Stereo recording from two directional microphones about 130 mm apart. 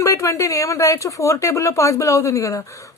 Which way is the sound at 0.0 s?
25° left (ahead or behind).